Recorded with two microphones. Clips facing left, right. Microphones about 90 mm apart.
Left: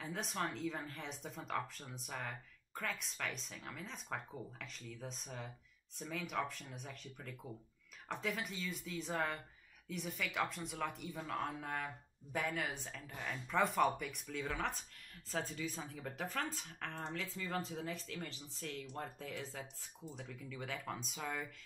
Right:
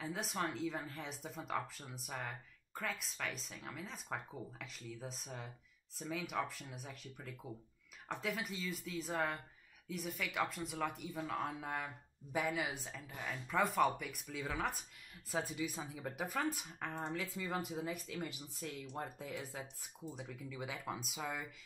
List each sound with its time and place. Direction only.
0.0 s speech: 5° right (ahead or behind)